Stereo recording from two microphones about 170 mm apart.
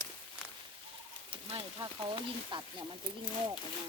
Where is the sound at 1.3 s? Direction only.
30° right (ahead or behind).